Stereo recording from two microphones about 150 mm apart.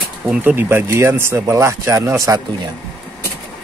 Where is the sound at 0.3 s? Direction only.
10° right (ahead or behind).